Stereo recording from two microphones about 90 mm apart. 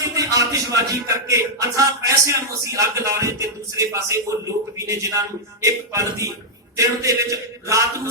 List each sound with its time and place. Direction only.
0.0 s a man's voice: 40° right (ahead or behind)